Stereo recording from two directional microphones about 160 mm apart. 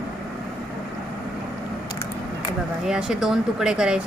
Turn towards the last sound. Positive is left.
turn(degrees=-5)  # may be behind; listen again after turning